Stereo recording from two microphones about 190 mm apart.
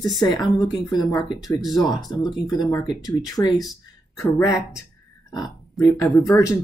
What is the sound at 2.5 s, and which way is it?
Speech, 20° left (ahead or behind).